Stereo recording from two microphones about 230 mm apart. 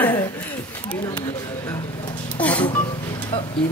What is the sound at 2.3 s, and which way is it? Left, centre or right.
Music, centre.